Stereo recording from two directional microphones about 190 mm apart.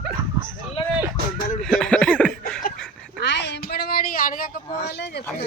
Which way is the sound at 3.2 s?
65° left (ahead or behind).